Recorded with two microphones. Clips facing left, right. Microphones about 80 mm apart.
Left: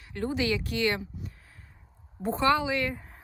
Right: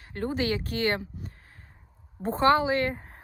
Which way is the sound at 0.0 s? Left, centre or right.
Right.